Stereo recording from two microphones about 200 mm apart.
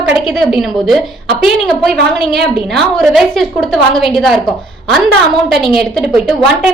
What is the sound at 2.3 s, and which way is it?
A woman's voice, centre (ahead or behind).